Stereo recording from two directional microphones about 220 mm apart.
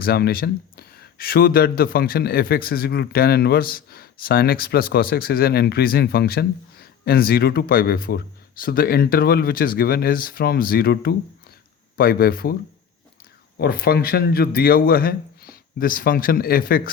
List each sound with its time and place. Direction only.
0.0 s speech: 45° left (ahead or behind)
13.6 s speech: 45° left (ahead or behind)